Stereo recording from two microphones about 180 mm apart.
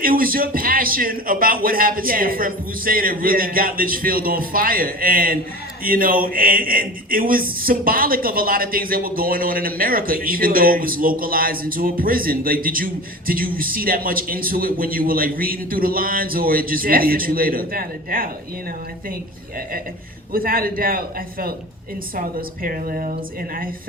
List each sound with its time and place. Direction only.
0.0 s a man's voice: 50° right (ahead or behind)
20.3 s a man's voice: 55° right (ahead or behind)